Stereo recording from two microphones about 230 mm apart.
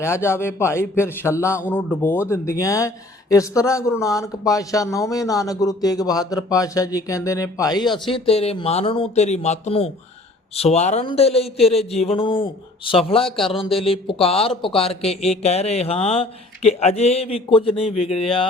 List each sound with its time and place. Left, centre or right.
0.0 s a man's voice: centre; by 18.2 s left